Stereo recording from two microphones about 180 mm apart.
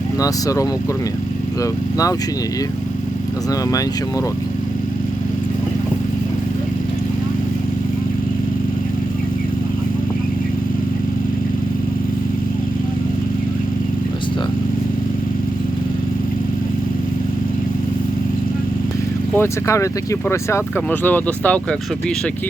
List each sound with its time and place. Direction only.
0.2 s speech: 20° left (ahead or behind)
19.4 s speech: 15° left (ahead or behind)